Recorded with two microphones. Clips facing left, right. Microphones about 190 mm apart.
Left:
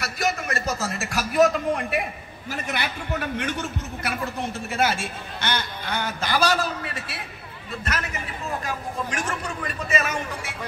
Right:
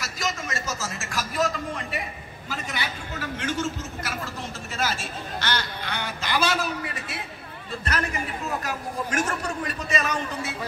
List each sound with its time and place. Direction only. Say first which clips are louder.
0.0 s a man's voice: left 4 dB; 60° left (ahead or behind); by 6.3 s 45° left (ahead or behind)
6.5 s a man's voice: left 2 dB; 10° right (ahead or behind)
7.8 s a man's voice: right 2 dB; 35° right (ahead or behind)
9.6 s a man's voice: left 1 dB; 40° right (ahead or behind)